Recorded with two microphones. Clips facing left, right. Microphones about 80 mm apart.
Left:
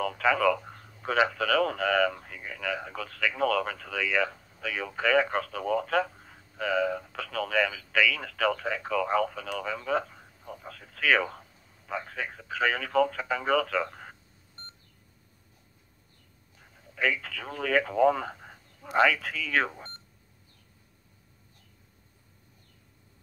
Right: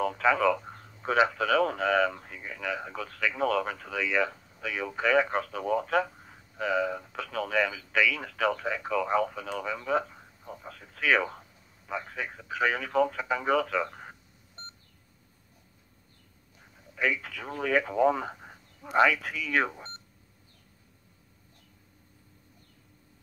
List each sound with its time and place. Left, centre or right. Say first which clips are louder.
0.0 s speech: even; right
16.7 s speech: even; right